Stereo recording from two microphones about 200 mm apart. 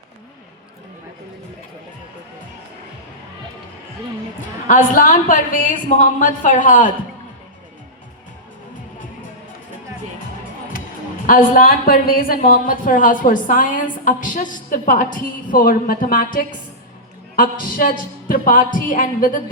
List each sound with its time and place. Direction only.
4.7 s a woman's voice: 45° left (ahead or behind)
11.3 s a woman's voice: 45° left (ahead or behind)